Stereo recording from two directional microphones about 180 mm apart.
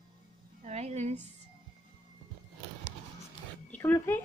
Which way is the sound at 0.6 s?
40° right (ahead or behind).